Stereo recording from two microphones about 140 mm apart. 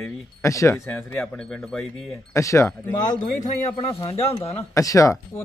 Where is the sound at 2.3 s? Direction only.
20° left (ahead or behind).